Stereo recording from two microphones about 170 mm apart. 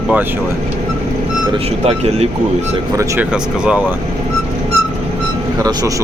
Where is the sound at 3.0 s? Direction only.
10° right (ahead or behind).